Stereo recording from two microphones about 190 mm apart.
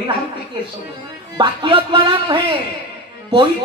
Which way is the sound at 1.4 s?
25° right (ahead or behind).